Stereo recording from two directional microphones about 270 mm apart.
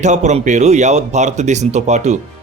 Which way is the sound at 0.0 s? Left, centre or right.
Right.